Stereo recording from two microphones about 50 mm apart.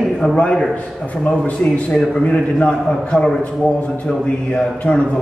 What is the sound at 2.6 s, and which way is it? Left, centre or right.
Speech, centre.